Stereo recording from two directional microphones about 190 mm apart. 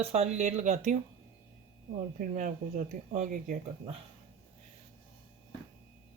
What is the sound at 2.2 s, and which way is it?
Speech, 40° right (ahead or behind).